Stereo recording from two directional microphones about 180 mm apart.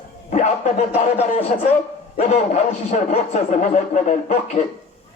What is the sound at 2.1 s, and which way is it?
A man's voice, 40° left (ahead or behind).